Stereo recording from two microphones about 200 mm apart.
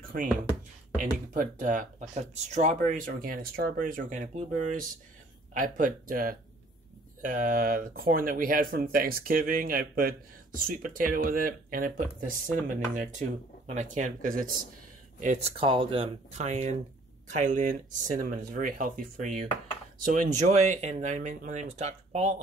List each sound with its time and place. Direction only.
0.9 s speech: 40° right (ahead or behind)